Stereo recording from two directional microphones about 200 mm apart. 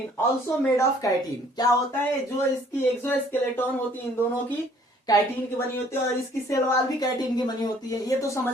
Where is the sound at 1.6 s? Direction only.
20° left (ahead or behind).